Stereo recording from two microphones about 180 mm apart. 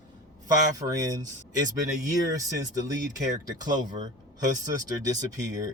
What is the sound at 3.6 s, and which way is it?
Speech, 20° right (ahead or behind).